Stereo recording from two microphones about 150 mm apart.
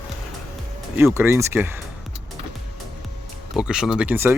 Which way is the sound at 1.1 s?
15° right (ahead or behind).